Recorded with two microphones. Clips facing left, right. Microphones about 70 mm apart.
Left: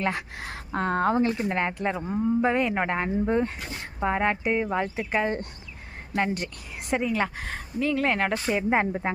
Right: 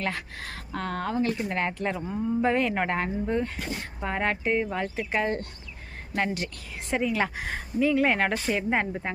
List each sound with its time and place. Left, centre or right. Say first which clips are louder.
0.0 s speech: left 3 dB; left
1.4 s speech: left 2 dB; centre
2.4 s speech: left 1 dB; centre
3.2 s speech: left 3 dB; left; by 8.5 s centre
8.5 s speech: left 3 dB; centre